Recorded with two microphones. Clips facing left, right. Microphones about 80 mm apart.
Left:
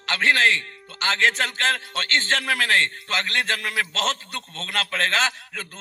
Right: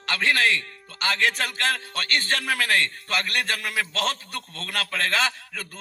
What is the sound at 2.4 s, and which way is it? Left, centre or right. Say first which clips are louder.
Speech: left 2 dB; left.